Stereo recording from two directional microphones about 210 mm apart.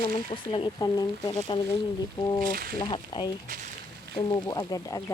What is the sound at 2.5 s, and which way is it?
Speech, 45° right (ahead or behind).